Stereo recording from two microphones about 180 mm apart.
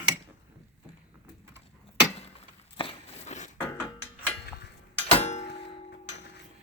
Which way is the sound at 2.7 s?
35° left (ahead or behind).